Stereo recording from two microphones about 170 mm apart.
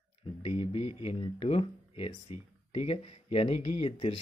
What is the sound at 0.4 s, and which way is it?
Speech, 35° left (ahead or behind).